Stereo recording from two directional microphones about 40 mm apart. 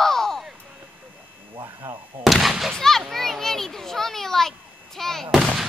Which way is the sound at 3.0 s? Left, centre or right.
Centre.